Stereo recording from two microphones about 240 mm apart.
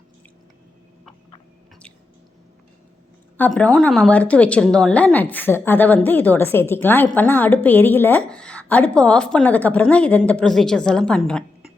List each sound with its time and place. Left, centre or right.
3.3 s a woman's voice: centre